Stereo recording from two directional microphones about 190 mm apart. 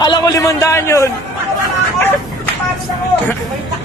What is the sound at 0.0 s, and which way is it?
A man's voice, 20° left (ahead or behind).